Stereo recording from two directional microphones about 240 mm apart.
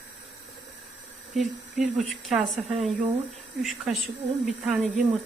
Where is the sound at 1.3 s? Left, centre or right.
Centre.